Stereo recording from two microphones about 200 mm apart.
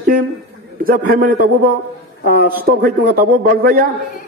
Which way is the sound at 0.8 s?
45° right (ahead or behind).